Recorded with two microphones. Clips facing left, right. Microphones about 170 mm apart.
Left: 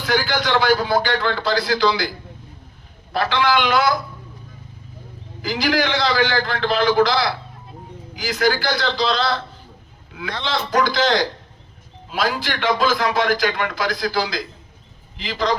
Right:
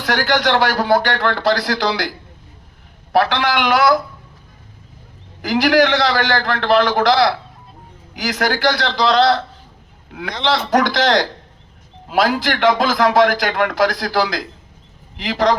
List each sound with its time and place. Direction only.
0.0 s a man's voice: 75° right (ahead or behind)
5.4 s a man's voice: 70° right (ahead or behind)
10.4 s a man's voice: 75° right (ahead or behind)